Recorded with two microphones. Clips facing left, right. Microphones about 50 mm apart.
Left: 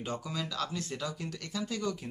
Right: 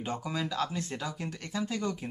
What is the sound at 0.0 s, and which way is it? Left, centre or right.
Speech, right.